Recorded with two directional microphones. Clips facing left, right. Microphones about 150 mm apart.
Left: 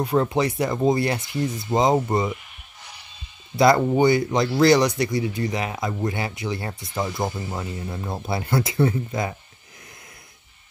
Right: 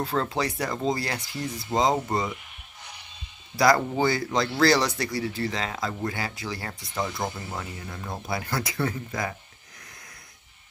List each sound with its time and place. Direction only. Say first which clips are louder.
0.0 s speech: left 6 dB; 20° left (ahead or behind)
3.5 s speech: left 4 dB; 25° left (ahead or behind)